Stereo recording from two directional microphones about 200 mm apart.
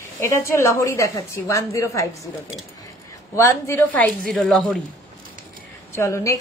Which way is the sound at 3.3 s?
15° left (ahead or behind).